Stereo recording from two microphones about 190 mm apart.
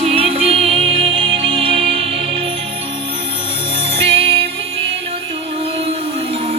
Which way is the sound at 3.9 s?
30° right (ahead or behind).